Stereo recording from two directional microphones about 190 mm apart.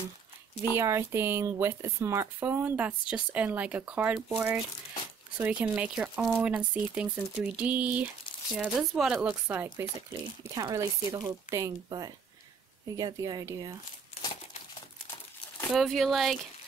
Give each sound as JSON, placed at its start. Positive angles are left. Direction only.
{"t": 0.7, "sound": "speech", "side_deg": -15}
{"t": 14.2, "sound": "crumpling", "side_deg": 30}
{"t": 15.7, "sound": "speech", "side_deg": 0}